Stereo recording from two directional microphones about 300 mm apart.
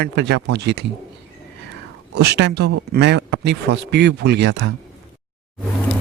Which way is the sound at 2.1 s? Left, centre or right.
Right.